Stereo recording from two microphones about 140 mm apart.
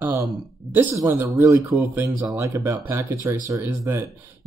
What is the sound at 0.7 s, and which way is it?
Speech, 15° right (ahead or behind).